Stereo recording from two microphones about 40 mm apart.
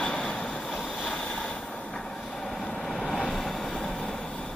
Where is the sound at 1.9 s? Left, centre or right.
Centre.